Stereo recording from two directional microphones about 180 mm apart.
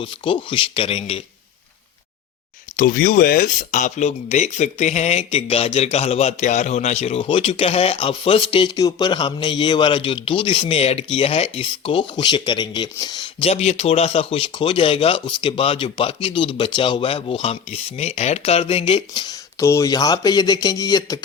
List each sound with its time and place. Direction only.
0.0 s speech: 30° left (ahead or behind)
2.7 s speech: 50° left (ahead or behind); by 13.2 s 25° left (ahead or behind)
13.4 s speech: 35° left (ahead or behind); by 21.2 s 20° left (ahead or behind)